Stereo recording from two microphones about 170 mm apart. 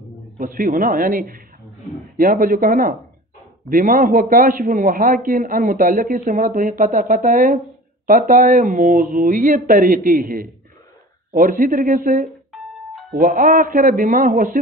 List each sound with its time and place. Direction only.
0.4 s a man's voice: 50° right (ahead or behind)